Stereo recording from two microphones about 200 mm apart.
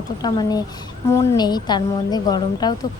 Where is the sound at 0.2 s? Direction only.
20° left (ahead or behind).